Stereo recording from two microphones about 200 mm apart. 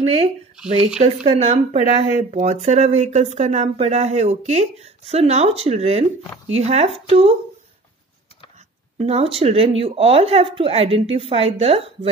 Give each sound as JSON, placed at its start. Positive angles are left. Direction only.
{"t": 1.0, "sound": "speech", "side_deg": -30}
{"t": 1.8, "sound": "speech", "side_deg": 30}
{"t": 2.3, "sound": "speech", "side_deg": -35}
{"t": 8.9, "sound": "speech", "side_deg": -30}